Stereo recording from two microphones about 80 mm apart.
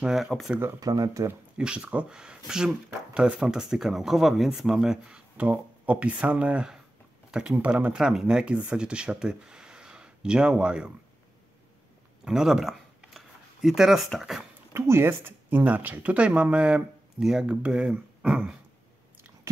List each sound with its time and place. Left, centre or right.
0.0 s speech: centre
0.7 s speech: right
1.6 s speech: centre
12.3 s a sound: centre
14.2 s speech: centre
14.7 s speech: right; by 18.6 s centre